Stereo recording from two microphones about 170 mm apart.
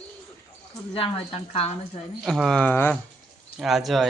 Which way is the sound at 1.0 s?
35° left (ahead or behind).